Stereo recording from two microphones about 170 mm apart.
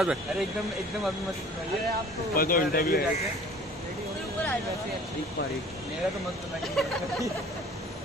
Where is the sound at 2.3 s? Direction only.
60° left (ahead or behind).